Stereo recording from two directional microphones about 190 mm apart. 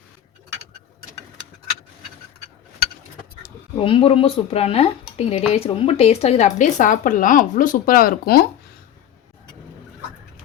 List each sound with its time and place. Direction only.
3.8 s speech: 30° left (ahead or behind); by 8.4 s 55° left (ahead or behind)